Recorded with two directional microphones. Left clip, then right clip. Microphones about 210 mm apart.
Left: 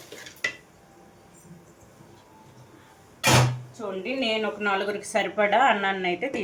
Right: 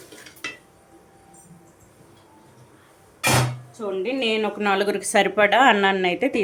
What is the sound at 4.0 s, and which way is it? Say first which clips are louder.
Speech: right 3 dB; 55° right (ahead or behind).